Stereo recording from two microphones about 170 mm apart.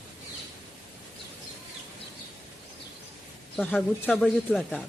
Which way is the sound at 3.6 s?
5° left (ahead or behind).